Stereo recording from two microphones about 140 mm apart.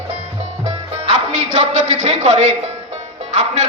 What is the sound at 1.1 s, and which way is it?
Music, 60° right (ahead or behind).